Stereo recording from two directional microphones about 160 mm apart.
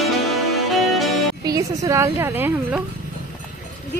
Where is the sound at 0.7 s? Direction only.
Centre (ahead or behind).